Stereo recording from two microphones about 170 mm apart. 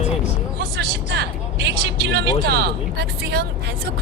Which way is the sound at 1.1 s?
80° right.